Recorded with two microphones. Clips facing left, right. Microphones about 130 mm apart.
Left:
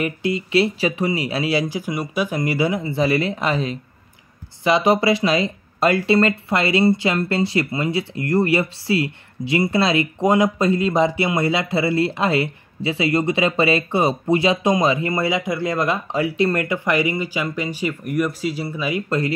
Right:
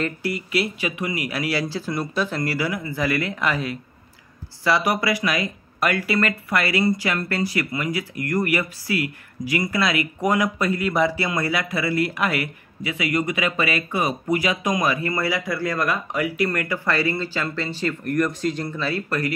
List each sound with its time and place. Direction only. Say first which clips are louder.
0.0 s speech: left 4 dB; 20° left (ahead or behind)